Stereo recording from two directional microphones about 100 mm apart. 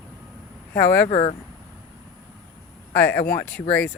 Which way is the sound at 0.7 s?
20° left (ahead or behind).